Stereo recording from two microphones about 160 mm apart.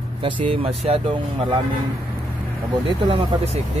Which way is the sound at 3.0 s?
35° right (ahead or behind).